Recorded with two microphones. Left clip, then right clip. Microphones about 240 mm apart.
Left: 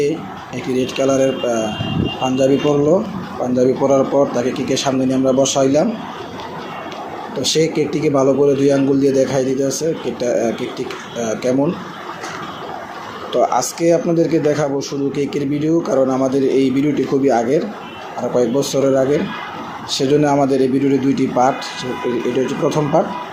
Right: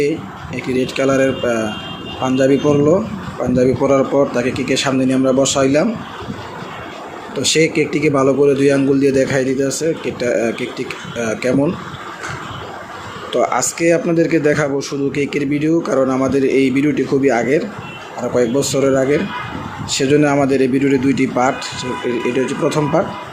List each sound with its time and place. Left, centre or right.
0.5 s speech: right
7.3 s speech: right
13.3 s speech: right
20.0 s speech: right